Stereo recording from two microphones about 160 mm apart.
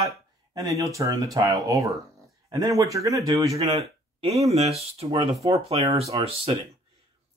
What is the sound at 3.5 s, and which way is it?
Speech, 40° right (ahead or behind).